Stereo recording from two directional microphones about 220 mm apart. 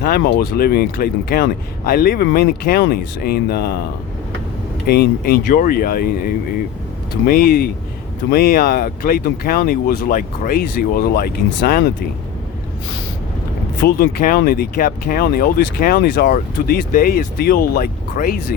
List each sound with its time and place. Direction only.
0.0 s speech: 45° left (ahead or behind)
4.9 s speech: 45° left (ahead or behind)
13.8 s speech: 40° left (ahead or behind)